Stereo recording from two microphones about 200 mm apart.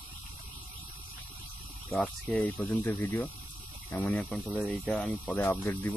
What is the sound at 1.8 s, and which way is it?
Speech, centre (ahead or behind).